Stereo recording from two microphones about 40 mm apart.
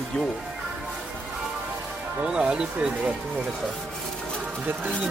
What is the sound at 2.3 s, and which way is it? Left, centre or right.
Speech, right.